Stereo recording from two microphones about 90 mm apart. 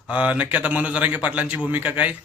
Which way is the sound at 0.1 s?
15° right (ahead or behind).